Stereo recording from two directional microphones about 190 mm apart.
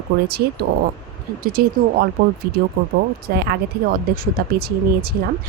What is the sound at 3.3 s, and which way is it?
A woman's voice, 60° right (ahead or behind).